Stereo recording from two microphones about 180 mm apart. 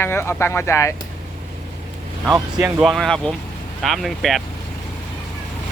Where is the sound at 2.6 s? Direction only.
5° right (ahead or behind).